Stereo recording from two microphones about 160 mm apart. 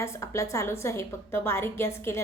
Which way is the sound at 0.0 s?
20° left (ahead or behind).